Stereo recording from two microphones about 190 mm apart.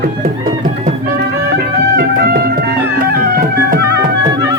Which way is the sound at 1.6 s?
55° right (ahead or behind).